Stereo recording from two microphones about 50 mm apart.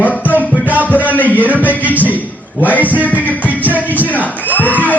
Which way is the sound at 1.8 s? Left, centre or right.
Right.